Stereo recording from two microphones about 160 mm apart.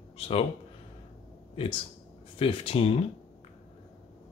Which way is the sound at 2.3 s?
35° left (ahead or behind).